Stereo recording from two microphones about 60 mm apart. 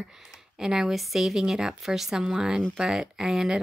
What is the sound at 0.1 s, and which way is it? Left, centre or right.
A woman's voice, centre.